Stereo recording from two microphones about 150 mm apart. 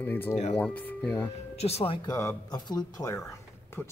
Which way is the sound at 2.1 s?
20° left (ahead or behind).